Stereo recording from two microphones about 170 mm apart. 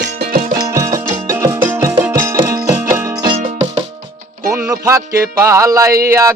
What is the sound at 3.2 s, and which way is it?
Music, 25° right (ahead or behind).